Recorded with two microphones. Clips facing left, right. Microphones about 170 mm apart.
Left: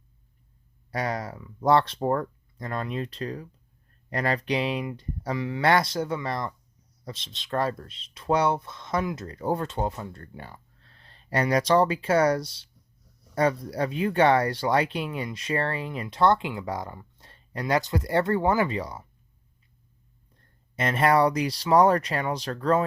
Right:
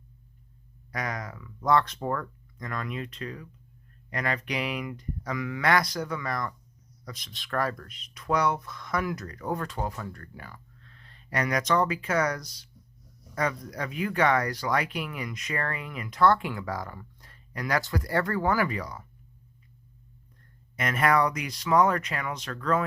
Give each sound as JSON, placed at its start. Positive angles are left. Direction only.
{"t": 0.9, "sound": "speech", "side_deg": 30}
{"t": 20.3, "sound": "speech", "side_deg": 30}